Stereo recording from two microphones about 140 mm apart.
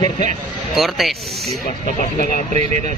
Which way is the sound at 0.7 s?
Centre (ahead or behind).